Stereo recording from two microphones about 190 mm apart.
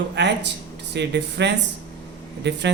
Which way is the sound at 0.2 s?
65° right (ahead or behind).